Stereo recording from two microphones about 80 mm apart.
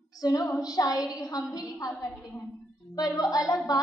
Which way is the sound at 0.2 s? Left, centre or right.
Left.